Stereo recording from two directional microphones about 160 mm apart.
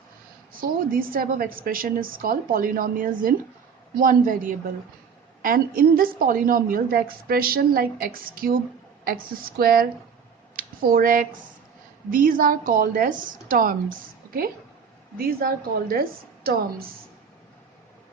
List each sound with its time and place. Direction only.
0.5 s a woman's voice: 60° right (ahead or behind)